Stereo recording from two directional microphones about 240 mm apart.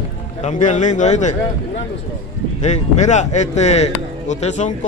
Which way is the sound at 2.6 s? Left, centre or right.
Left.